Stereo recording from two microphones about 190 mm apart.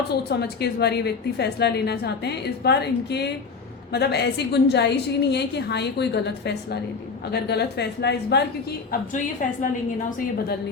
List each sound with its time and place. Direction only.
0.3 s a woman's voice: 60° left (ahead or behind)
8.9 s a woman's voice: 45° left (ahead or behind)